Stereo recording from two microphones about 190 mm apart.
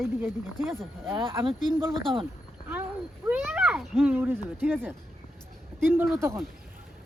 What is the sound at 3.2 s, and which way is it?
A child's voice, 10° right (ahead or behind).